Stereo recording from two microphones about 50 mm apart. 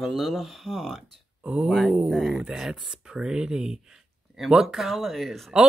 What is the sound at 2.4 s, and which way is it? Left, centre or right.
Speech, centre.